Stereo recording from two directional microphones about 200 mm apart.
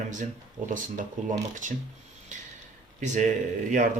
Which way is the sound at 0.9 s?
40° right (ahead or behind).